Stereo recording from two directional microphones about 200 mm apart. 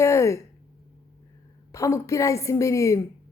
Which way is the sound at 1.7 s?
15° left (ahead or behind).